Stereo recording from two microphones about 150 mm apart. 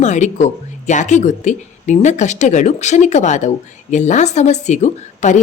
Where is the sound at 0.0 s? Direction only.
50° left (ahead or behind).